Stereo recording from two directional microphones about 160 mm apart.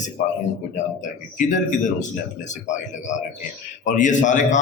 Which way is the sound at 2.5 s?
50° left (ahead or behind).